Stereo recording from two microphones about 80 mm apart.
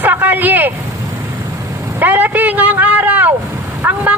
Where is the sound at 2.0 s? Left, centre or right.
Right.